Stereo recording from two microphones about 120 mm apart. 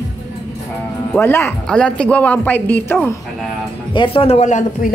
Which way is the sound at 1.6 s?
10° left (ahead or behind).